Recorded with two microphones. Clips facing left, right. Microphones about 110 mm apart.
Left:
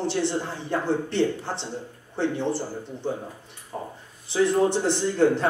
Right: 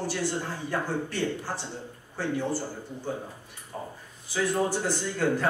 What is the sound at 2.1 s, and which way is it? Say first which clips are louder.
Speech: left 4 dB; 20° left (ahead or behind).